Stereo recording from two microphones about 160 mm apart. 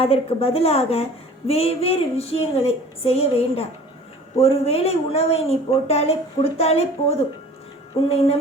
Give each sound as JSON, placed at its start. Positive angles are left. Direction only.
{"t": 0.0, "sound": "speech", "side_deg": 40}